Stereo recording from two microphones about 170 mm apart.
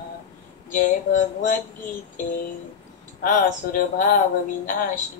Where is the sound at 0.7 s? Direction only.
50° left (ahead or behind).